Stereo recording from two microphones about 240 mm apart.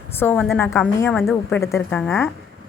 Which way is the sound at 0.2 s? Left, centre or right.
Centre.